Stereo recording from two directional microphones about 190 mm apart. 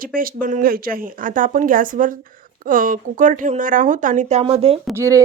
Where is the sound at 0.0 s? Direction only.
50° right (ahead or behind); by 4.8 s 30° right (ahead or behind).